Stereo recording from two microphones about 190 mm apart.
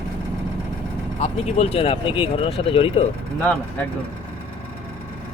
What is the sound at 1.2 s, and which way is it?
Speech, 30° left (ahead or behind).